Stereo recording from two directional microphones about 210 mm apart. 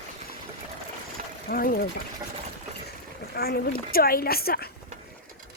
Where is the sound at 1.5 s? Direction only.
45° left (ahead or behind).